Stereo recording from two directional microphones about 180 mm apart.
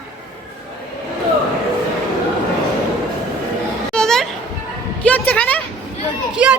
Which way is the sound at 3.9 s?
5° left (ahead or behind).